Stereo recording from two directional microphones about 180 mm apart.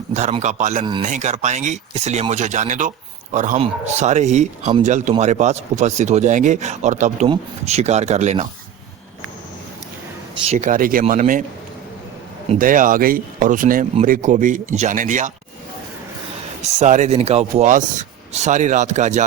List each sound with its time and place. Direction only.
0.1 s speech: 40° right (ahead or behind)
10.4 s speech: 40° right (ahead or behind)
12.5 s speech: 50° right (ahead or behind)
16.8 s speech: 40° right (ahead or behind)